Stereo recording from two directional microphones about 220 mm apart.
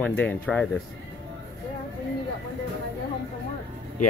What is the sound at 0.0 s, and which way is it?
Speech, 5° left (ahead or behind).